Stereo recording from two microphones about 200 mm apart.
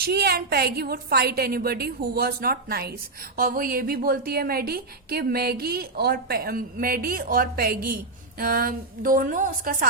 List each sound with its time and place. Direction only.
0.0 s a woman's voice: 50° right (ahead or behind)